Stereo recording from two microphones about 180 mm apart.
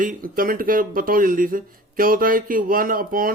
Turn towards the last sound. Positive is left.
turn(degrees=-50)  # may be behind; listen again after turning